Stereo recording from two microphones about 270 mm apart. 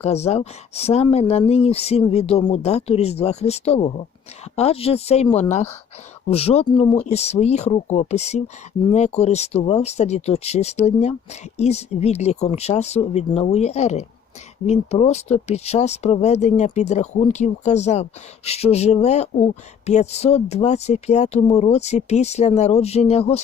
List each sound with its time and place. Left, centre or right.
0.0 s speech: left